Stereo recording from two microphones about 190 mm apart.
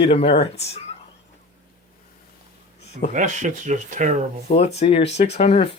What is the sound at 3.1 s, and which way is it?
Speech, 40° right (ahead or behind).